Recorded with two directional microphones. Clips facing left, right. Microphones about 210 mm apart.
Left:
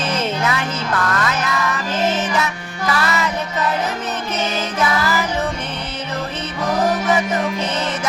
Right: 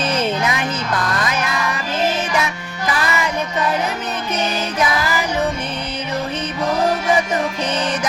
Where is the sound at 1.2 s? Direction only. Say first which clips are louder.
Even; 15° right (ahead or behind).